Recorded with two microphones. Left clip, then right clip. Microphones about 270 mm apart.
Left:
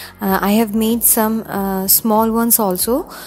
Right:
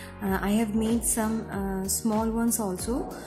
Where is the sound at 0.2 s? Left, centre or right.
Left.